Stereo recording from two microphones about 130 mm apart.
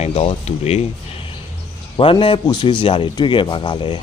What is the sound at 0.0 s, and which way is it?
Speech, 55° left (ahead or behind).